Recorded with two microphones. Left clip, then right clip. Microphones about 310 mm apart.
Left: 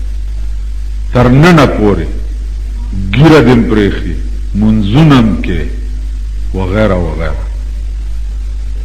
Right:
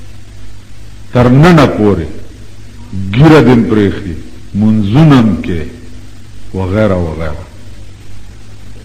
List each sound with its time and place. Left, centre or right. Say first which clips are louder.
1.1 s a man's voice: even; left
3.1 s a man's voice: even; left